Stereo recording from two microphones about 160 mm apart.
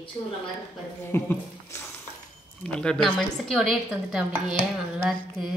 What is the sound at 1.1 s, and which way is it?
Speech, 15° left (ahead or behind).